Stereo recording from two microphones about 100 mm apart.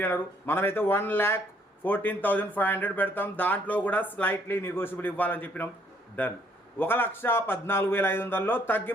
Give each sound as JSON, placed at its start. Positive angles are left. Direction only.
{"t": 0.0, "sound": "a man's voice", "side_deg": 20}